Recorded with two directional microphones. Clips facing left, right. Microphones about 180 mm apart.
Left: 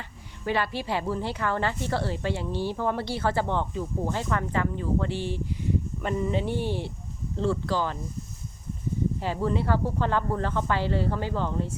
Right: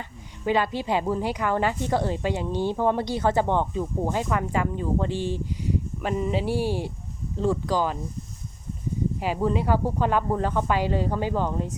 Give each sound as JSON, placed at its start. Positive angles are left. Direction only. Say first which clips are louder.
{"t": 0.4, "sound": "speech", "louder": "right 4 dB", "side_deg": -15}
{"t": 9.2, "sound": "speech", "louder": "right 4 dB", "side_deg": -15}